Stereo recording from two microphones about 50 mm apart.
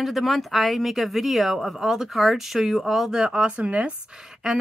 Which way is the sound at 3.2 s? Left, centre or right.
Centre.